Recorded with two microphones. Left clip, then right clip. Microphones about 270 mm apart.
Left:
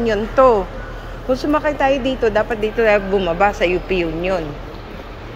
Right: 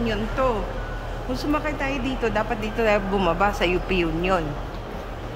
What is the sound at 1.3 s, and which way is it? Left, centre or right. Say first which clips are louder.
Speech: left 8 dB; centre.